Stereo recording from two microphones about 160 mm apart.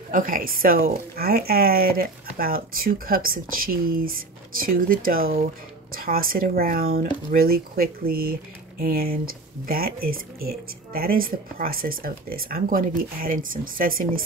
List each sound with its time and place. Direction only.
0.1 s speech: 60° right (ahead or behind)